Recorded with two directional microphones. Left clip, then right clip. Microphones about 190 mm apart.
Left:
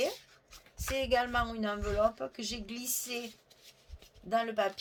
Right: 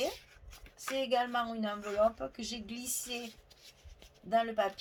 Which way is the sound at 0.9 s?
40° left (ahead or behind).